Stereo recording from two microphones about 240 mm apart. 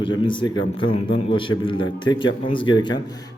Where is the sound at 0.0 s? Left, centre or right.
Centre.